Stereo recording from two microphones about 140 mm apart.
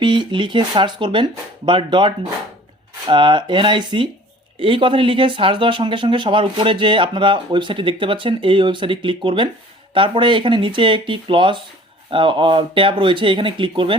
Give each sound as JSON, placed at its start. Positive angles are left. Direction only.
{"t": 0.0, "sound": "speech", "side_deg": -35}